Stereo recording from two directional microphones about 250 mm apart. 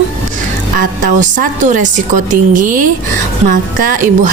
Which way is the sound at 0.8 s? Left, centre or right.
Right.